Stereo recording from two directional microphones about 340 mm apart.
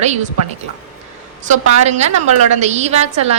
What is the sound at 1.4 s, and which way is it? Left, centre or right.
A woman's voice, centre.